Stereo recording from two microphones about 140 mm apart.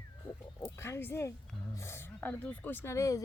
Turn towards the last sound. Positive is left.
turn(degrees=25)  # may be behind; listen again after turning